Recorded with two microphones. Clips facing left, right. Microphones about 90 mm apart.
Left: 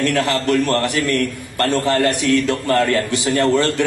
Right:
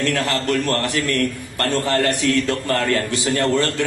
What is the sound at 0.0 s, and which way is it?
A man's voice, 20° left (ahead or behind).